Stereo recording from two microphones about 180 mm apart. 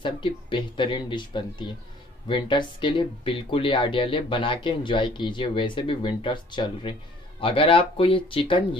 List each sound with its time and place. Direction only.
0.0 s speech: 25° left (ahead or behind)